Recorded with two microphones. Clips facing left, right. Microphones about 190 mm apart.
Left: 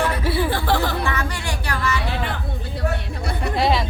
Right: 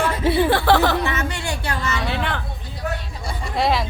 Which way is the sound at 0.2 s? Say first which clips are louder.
Right 4 dB; 20° right (ahead or behind).